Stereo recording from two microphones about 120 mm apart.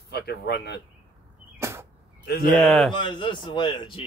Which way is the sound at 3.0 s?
40° left (ahead or behind).